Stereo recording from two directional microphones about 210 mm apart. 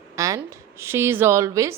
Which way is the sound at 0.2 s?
15° right (ahead or behind).